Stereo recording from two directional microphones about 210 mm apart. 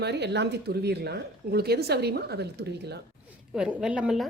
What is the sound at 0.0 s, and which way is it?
Speech, 55° right (ahead or behind).